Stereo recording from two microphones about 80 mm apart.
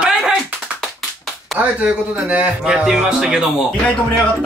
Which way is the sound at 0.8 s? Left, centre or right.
Centre.